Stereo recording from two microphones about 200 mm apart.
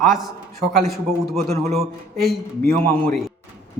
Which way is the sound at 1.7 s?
Centre (ahead or behind).